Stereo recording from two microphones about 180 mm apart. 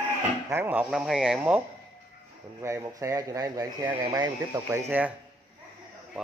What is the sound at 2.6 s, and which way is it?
Speech, 15° right (ahead or behind).